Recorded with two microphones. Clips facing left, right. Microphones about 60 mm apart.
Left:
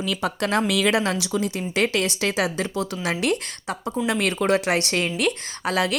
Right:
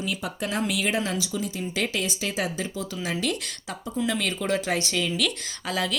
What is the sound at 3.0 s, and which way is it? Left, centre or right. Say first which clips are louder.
Speech: left 4 dB; left.